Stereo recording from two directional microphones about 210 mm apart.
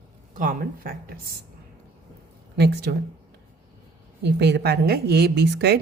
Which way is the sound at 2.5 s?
50° right (ahead or behind).